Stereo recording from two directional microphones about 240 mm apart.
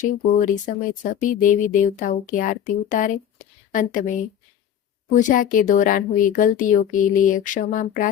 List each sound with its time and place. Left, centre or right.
0.0 s speech: left